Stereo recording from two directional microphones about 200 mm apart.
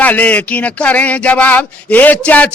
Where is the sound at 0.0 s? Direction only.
10° left (ahead or behind).